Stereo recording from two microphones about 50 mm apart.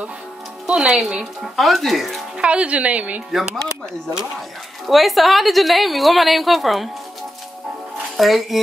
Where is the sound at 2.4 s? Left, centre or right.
Right.